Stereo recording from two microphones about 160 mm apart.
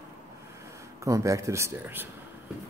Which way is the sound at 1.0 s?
20° right (ahead or behind).